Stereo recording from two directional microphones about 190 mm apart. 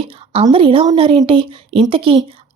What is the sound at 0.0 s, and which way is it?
A woman's voice, 30° right (ahead or behind).